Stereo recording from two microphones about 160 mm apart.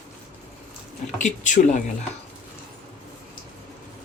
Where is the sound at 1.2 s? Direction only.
50° left (ahead or behind).